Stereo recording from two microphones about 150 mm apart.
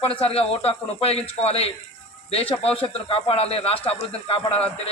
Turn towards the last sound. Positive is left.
turn(degrees=40)  # may be behind; listen again after turning